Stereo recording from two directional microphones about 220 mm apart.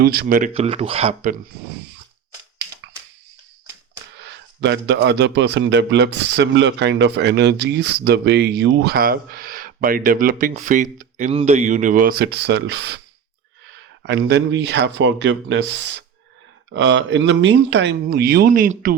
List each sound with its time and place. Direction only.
0.0 s speech: 45° right (ahead or behind)
4.2 s speech: 50° right (ahead or behind)
14.0 s speech: 50° right (ahead or behind)